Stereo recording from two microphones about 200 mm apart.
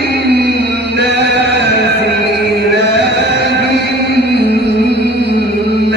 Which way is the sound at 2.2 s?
55° right (ahead or behind).